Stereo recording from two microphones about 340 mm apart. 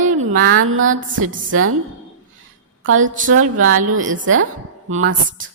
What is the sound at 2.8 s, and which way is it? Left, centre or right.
Speech, right.